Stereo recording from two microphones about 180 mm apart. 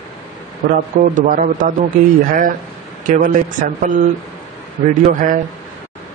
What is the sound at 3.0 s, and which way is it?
Speech, 50° right (ahead or behind).